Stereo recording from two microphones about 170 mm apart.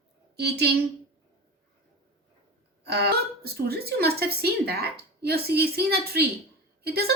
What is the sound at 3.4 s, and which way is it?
Speech, 65° right (ahead or behind).